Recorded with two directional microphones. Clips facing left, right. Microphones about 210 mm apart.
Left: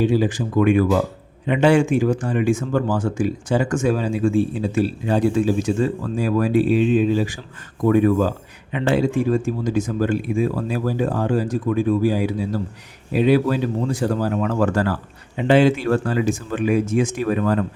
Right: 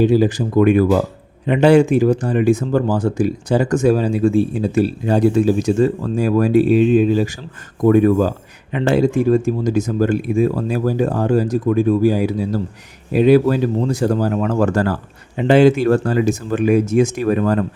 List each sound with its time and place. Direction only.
0.0 s speech: 40° right (ahead or behind)